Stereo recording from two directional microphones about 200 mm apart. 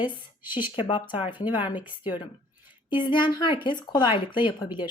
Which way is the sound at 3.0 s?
25° left (ahead or behind).